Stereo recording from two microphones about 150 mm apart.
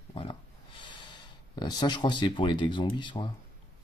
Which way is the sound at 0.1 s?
35° left (ahead or behind).